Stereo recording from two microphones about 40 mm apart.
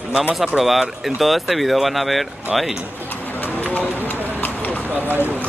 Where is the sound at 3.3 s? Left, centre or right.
Left.